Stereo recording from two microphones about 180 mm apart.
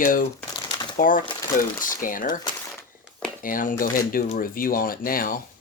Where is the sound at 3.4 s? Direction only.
50° left (ahead or behind).